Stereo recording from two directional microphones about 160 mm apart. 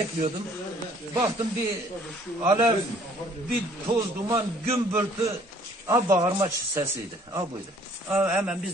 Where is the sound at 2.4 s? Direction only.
15° right (ahead or behind).